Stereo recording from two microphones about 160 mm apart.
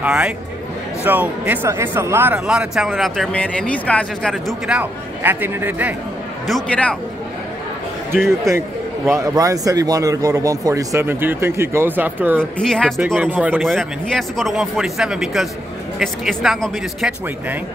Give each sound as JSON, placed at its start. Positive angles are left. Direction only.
{"t": 0.0, "sound": "speech", "side_deg": -5}
{"t": 6.4, "sound": "a man's voice", "side_deg": 5}
{"t": 8.3, "sound": "a man's voice", "side_deg": -15}
{"t": 12.5, "sound": "speech", "side_deg": 5}
{"t": 13.2, "sound": "speech", "side_deg": -10}